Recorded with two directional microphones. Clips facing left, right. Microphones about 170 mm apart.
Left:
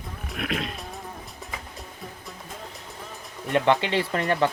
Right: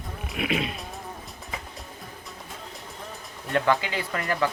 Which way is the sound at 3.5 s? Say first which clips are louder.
Left 3 dB; 25° left (ahead or behind).